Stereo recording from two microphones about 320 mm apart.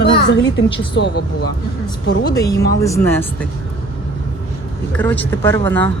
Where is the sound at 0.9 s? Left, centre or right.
Left.